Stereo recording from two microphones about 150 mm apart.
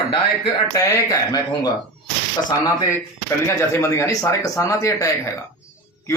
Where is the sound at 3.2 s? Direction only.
20° left (ahead or behind).